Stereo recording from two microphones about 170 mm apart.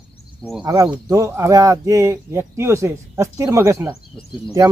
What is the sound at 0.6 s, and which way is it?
Speech, 20° right (ahead or behind).